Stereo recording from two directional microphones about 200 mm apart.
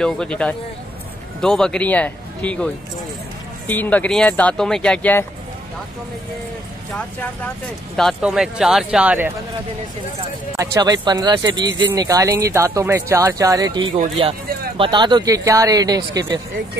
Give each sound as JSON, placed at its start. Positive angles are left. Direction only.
{"t": 0.0, "sound": "speech", "side_deg": 5}
{"t": 7.2, "sound": "speech", "side_deg": 5}
{"t": 10.5, "sound": "speech", "side_deg": -15}